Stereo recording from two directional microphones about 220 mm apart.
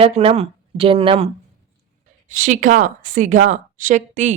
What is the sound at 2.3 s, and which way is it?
A woman's voice, 35° right (ahead or behind).